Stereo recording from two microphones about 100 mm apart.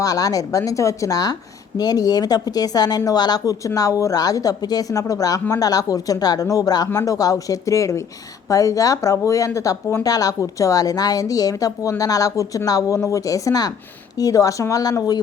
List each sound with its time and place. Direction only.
0.0 s speech: 35° left (ahead or behind)